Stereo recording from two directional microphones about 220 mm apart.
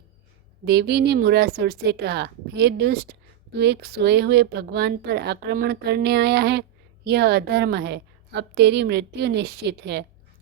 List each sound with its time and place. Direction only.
0.6 s speech: 50° right (ahead or behind)